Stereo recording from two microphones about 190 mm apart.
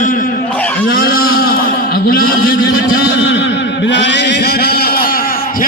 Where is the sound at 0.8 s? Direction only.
50° left (ahead or behind).